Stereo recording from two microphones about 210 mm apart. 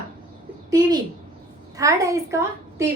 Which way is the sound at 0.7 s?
20° right (ahead or behind).